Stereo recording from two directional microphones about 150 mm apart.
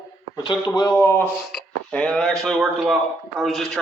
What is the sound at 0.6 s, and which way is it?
Speech, 25° left (ahead or behind).